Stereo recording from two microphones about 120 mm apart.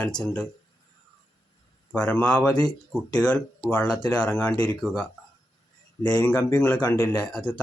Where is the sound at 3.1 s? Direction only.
10° left (ahead or behind).